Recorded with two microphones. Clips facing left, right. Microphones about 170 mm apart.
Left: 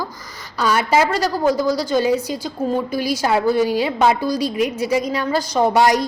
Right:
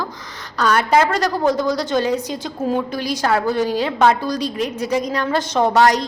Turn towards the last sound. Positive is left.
turn(degrees=10)  # may be behind; listen again after turning